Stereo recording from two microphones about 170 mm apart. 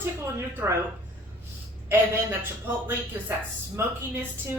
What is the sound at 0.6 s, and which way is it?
Speech, 10° right (ahead or behind).